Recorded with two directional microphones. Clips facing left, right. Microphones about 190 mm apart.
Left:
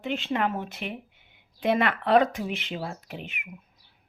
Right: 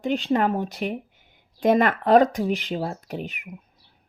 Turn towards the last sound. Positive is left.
turn(degrees=-40)  # may be behind; listen again after turning